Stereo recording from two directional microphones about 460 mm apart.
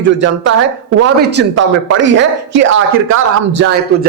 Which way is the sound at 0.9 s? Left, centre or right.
Right.